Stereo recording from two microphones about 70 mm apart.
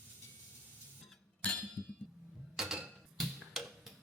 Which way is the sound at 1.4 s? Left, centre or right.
Left.